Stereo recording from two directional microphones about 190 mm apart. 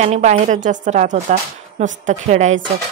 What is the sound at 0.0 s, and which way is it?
Speech, 35° right (ahead or behind).